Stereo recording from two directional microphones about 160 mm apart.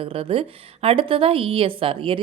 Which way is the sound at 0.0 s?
35° right (ahead or behind).